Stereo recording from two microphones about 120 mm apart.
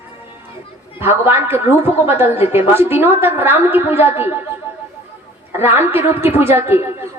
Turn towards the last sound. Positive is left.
turn(degrees=-20)  # may be behind; listen again after turning